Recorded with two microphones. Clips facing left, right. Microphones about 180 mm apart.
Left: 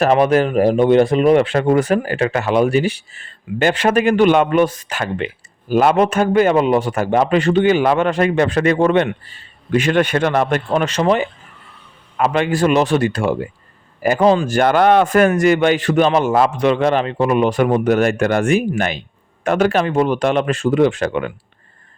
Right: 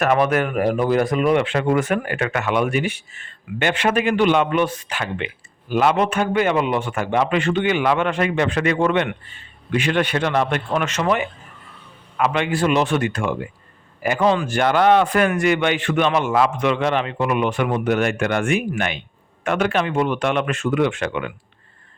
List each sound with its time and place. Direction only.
0.0 s speech: 30° left (ahead or behind)